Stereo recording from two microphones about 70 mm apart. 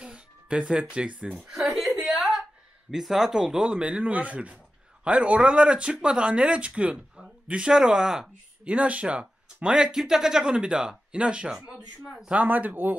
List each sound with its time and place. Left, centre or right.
0.0 s speech: centre
1.4 s a sound: centre
2.9 s speech: centre
12.3 s speech: right